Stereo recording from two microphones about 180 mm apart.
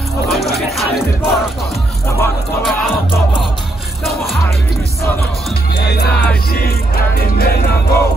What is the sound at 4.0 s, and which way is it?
Music, centre (ahead or behind).